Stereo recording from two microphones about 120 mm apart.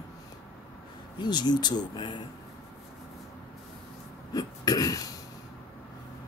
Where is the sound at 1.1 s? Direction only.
40° left (ahead or behind).